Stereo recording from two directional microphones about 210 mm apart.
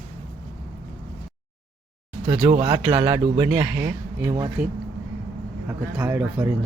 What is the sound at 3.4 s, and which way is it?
Speech, 5° right (ahead or behind).